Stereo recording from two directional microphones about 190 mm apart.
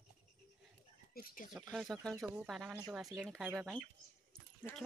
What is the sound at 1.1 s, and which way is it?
Speech, 45° left (ahead or behind).